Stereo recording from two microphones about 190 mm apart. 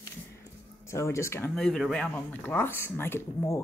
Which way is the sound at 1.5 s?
Centre (ahead or behind).